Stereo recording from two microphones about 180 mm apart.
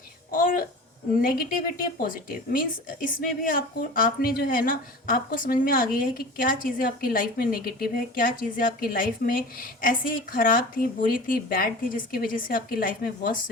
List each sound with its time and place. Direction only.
0.3 s a woman's voice: 50° left (ahead or behind)